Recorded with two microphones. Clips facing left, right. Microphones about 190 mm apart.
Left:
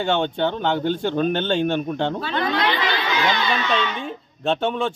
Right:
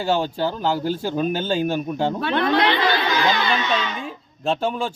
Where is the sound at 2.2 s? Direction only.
60° right (ahead or behind).